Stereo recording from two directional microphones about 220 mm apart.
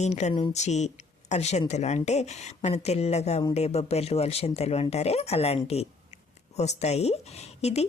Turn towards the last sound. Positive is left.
turn(degrees=30)  # may be behind; listen again after turning